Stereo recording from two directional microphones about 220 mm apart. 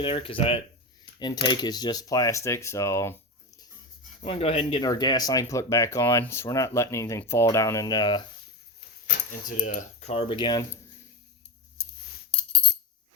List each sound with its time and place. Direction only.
0.0 s speech: 25° left (ahead or behind)
4.2 s speech: 25° left (ahead or behind)
9.6 s speech: 35° left (ahead or behind); by 10.7 s 20° left (ahead or behind)